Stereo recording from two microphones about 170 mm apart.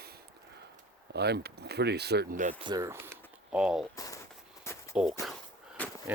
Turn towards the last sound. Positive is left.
turn(degrees=10)  # may be behind; listen again after turning